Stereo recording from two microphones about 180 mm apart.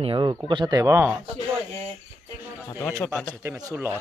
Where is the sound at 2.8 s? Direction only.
15° left (ahead or behind).